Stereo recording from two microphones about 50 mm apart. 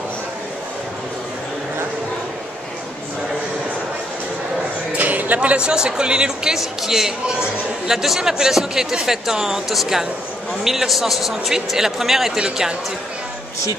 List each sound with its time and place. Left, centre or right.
4.9 s a sound: right
5.7 s a man's voice: centre
12.4 s speech: centre